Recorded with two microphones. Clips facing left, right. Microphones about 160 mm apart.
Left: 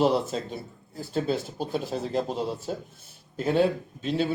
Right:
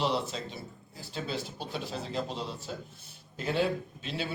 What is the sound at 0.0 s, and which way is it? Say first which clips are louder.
Speech: left 7 dB; 45° left (ahead or behind).